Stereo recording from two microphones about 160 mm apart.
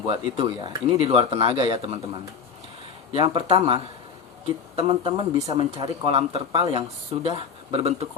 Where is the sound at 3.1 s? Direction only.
35° right (ahead or behind).